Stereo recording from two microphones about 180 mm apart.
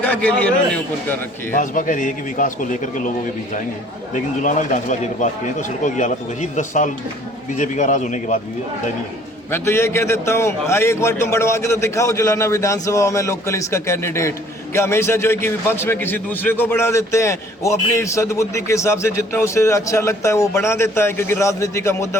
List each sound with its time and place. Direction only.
0.0 s a man's voice: 10° left (ahead or behind)
1.5 s speech: 45° left (ahead or behind)
4.1 s speech: 45° left (ahead or behind)
9.5 s a man's voice: 15° left (ahead or behind)